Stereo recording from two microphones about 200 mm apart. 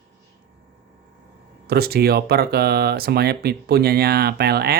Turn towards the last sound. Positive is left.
turn(degrees=-50)  # may be behind; listen again after turning